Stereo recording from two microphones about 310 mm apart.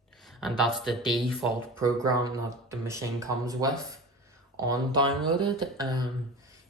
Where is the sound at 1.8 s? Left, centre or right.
Centre.